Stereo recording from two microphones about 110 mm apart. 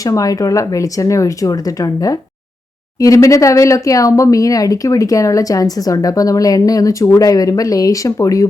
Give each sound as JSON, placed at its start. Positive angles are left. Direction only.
{"t": 0.0, "sound": "speech", "side_deg": 30}